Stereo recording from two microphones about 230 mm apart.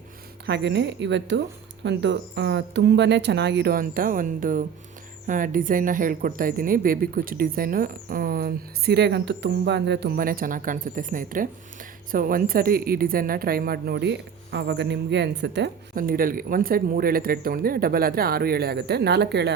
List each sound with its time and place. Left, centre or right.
0.4 s a woman's voice: right